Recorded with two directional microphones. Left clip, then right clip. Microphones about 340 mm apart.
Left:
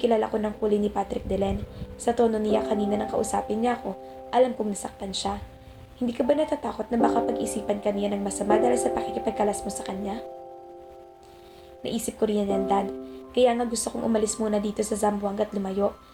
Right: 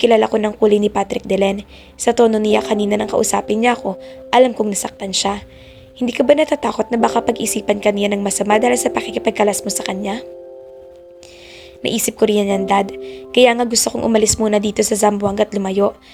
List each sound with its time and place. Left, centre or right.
0.0 s a woman's voice: right
11.8 s a woman's voice: right